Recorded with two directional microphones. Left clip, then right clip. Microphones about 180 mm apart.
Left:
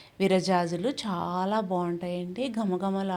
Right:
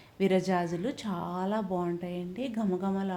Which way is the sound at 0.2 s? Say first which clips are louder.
Left 3 dB; 25° left (ahead or behind).